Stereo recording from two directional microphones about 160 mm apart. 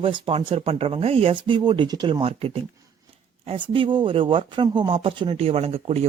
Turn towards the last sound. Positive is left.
turn(degrees=-40)  # may be behind; listen again after turning